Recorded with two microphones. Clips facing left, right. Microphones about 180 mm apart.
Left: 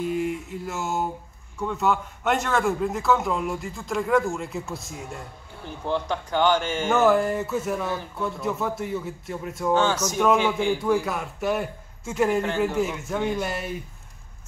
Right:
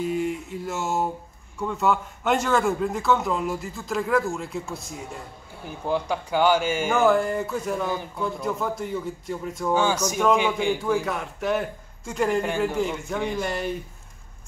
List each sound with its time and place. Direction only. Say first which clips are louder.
0.0 s a man's voice: even; centre (ahead or behind)
7.0 s a man's voice: left 1 dB; centre (ahead or behind)
9.8 s a man's voice: even; 10° right (ahead or behind)
10.8 s a man's voice: left 1 dB; centre (ahead or behind)
12.4 s a man's voice: even; 10° right (ahead or behind)
12.6 s a man's voice: even; 5° left (ahead or behind)